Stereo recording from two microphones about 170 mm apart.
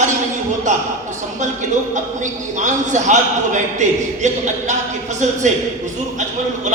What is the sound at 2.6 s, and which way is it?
A man's voice, 45° right (ahead or behind).